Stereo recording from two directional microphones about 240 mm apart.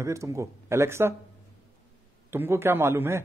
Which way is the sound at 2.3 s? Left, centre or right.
Centre.